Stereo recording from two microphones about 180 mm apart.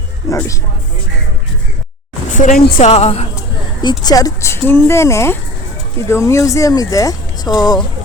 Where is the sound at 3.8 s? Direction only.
20° left (ahead or behind).